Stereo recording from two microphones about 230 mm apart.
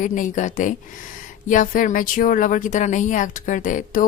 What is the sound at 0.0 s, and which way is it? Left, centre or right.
A woman's voice, left.